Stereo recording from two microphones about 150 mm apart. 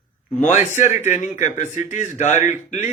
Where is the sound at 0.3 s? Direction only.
55° left (ahead or behind).